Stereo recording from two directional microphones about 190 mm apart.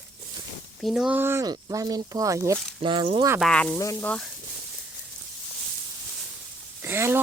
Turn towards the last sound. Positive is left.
turn(degrees=-10)  # may be behind; listen again after turning